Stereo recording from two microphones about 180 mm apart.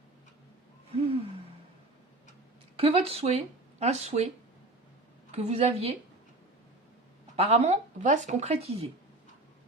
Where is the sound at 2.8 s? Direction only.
35° right (ahead or behind).